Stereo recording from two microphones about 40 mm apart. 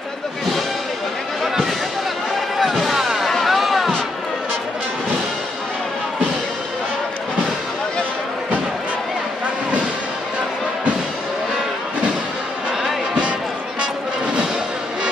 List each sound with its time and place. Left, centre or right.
2.6 s music: centre
12.8 s music: centre